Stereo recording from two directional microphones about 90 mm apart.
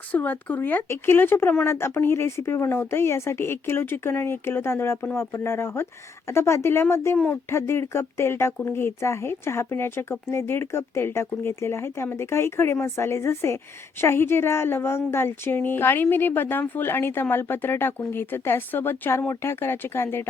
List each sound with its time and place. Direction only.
0.1 s speech: 20° left (ahead or behind)